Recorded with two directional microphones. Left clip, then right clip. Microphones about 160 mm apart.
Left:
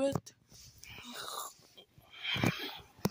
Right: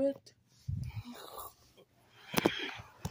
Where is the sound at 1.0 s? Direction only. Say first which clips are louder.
Left 6 dB; 10° right (ahead or behind).